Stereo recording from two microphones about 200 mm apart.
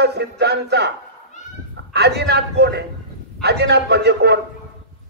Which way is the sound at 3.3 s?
55° right (ahead or behind).